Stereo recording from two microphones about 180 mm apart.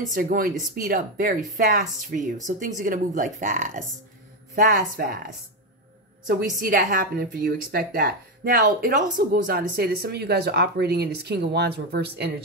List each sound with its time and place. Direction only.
0.1 s a woman's voice: 50° right (ahead or behind)